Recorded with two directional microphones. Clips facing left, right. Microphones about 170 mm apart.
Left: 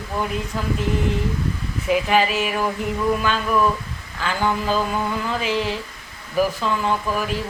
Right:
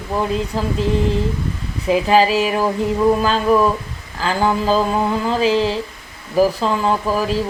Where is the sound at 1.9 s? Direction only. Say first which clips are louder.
Right 5 dB; 35° right (ahead or behind).